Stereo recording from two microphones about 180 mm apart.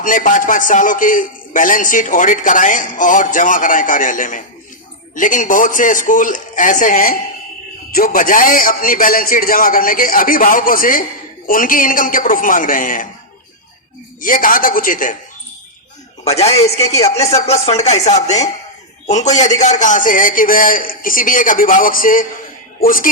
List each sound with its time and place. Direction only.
0.0 s a man's voice: 45° left (ahead or behind)
14.2 s a man's voice: 50° left (ahead or behind)
16.2 s a man's voice: 35° left (ahead or behind)